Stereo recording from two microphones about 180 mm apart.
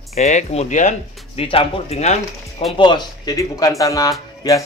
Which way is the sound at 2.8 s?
25° left (ahead or behind).